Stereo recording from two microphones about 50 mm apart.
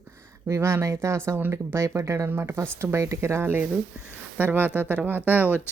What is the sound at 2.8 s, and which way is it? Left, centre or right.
Speech, right.